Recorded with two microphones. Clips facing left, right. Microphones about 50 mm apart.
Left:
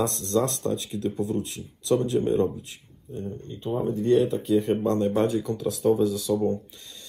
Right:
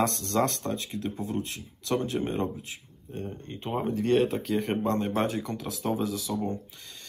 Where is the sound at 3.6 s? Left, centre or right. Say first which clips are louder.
Left 3 dB; right.